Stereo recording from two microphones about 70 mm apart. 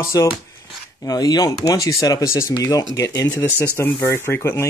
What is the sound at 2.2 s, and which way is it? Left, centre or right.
Speech, left.